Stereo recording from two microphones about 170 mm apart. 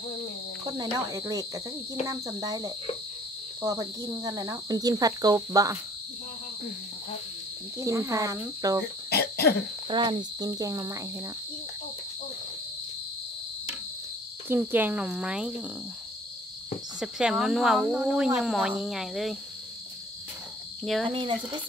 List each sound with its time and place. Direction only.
0.7 s cricket: 25° right (ahead or behind)
7.8 s cricket: 20° right (ahead or behind)
9.1 s cough: 70° left (ahead or behind)
9.8 s cricket: 30° right (ahead or behind)
14.5 s speech: 10° right (ahead or behind)
17.0 s speech: 5° right (ahead or behind)
20.8 s speech: centre (ahead or behind)
21.1 s cricket: 30° right (ahead or behind)